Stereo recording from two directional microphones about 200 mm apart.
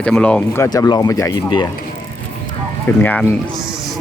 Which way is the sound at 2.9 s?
10° left (ahead or behind).